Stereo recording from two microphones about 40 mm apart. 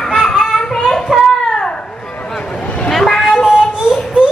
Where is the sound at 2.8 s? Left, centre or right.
Centre.